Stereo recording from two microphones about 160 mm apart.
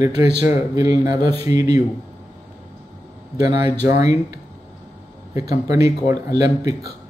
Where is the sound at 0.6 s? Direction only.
25° right (ahead or behind).